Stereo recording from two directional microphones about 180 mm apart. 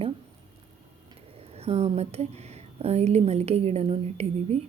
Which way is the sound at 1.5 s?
35° right (ahead or behind).